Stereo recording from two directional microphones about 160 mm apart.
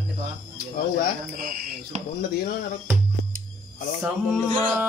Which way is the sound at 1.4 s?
65° right (ahead or behind).